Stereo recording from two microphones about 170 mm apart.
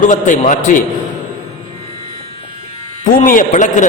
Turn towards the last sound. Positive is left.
turn(degrees=45)  # may be behind; listen again after turning